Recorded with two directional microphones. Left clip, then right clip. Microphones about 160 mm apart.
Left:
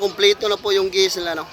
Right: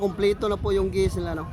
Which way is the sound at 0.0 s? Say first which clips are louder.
Left 6 dB; 20° right (ahead or behind).